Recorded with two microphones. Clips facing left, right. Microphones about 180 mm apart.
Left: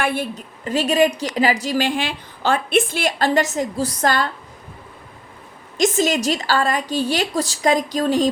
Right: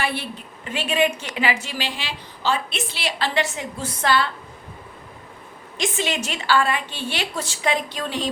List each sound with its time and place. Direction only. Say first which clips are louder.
0.0 s a woman's voice: left 5 dB; 50° left (ahead or behind)
5.7 s a woman's voice: left 7 dB; 40° left (ahead or behind)